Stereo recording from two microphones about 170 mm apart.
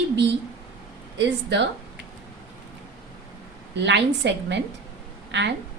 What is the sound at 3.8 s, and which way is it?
A woman's voice, 90° right.